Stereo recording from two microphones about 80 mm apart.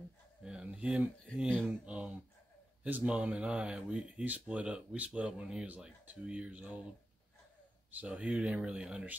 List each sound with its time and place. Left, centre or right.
0.4 s speech: centre
7.9 s speech: centre